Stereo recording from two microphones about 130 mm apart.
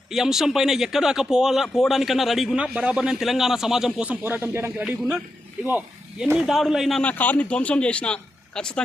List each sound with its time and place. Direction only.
0.1 s speech: 5° right (ahead or behind)
6.3 s speech: centre (ahead or behind)